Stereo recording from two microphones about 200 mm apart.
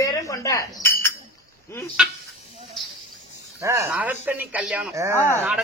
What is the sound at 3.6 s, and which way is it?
A woman's voice, 15° right (ahead or behind).